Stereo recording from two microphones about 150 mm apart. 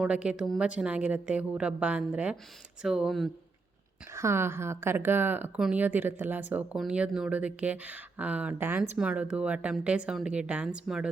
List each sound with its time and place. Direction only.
0.0 s speech: 5° right (ahead or behind)
4.1 s speech: 20° right (ahead or behind)